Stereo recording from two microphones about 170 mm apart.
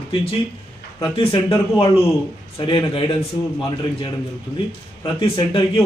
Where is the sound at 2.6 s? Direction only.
30° left (ahead or behind).